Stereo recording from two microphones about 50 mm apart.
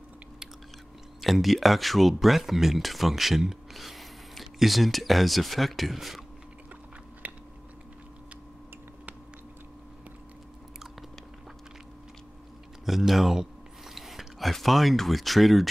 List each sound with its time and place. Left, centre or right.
1.2 s speech: centre
7.2 s a sound: right
12.8 s speech: centre